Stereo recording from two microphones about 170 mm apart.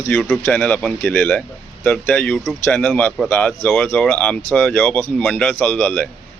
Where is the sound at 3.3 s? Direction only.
10° left (ahead or behind).